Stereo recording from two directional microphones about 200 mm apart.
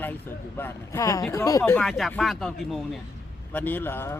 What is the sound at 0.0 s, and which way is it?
Speech, 10° left (ahead or behind).